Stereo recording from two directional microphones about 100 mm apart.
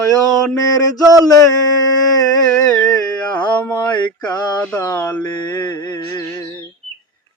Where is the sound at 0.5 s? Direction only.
40° left (ahead or behind).